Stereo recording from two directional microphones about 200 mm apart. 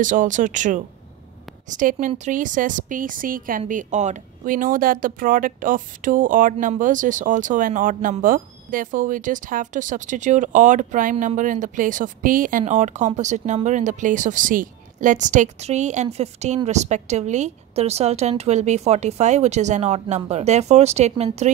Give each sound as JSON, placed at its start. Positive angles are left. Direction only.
{"t": 0.0, "sound": "a woman's voice", "side_deg": -40}